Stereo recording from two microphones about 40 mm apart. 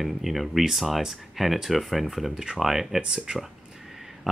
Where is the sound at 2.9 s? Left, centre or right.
Right.